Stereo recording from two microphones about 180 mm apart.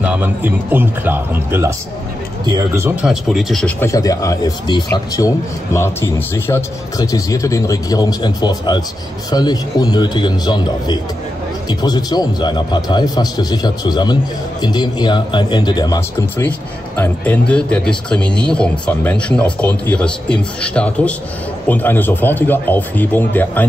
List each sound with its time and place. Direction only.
0.0 s speech: 10° right (ahead or behind)
3.1 s speech: centre (ahead or behind)
3.8 s a man's voice: 20° left (ahead or behind)
16.4 s speech: 10° left (ahead or behind)